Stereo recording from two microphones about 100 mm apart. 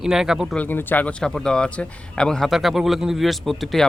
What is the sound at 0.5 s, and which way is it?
Speech, 20° left (ahead or behind).